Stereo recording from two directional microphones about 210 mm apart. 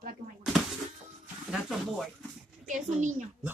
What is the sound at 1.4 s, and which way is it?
Speech, centre (ahead or behind).